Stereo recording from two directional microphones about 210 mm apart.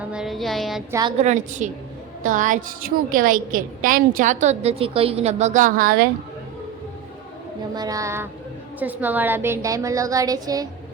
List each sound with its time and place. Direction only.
0.0 s a sound: 5° right (ahead or behind)
0.9 s a woman's voice: 15° right (ahead or behind)
1.2 s a woman's voice: 35° right (ahead or behind)
7.8 s a woman's voice: 15° right (ahead or behind)